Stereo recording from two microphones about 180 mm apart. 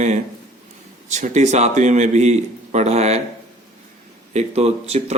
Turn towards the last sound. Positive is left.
turn(degrees=-35)  # may be behind; listen again after turning